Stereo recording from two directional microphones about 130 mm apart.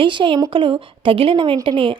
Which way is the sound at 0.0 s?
40° right (ahead or behind).